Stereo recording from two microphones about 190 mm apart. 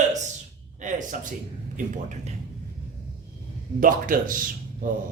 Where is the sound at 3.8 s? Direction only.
45° right (ahead or behind).